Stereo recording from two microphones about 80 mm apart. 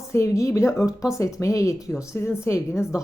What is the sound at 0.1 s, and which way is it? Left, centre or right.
A woman's voice, left.